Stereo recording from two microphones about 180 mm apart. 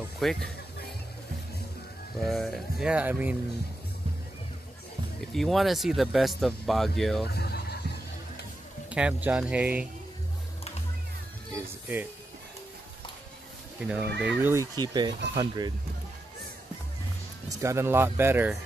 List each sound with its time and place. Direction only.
0.2 s speech: centre (ahead or behind)
2.2 s speech: centre (ahead or behind)
5.2 s speech: centre (ahead or behind)
7.2 s vehicle: 65° left (ahead or behind)
8.9 s speech: 5° right (ahead or behind)
11.5 s speech: 10° right (ahead or behind)
13.7 s speech: 5° right (ahead or behind); by 15.7 s 20° right (ahead or behind)
17.5 s speech: 15° right (ahead or behind)